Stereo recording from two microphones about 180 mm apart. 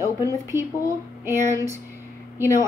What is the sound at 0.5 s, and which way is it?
A woman's voice, 15° right (ahead or behind).